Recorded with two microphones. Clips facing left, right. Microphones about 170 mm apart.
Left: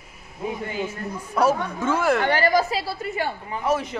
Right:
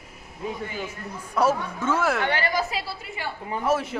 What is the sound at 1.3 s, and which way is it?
Speech, centre (ahead or behind).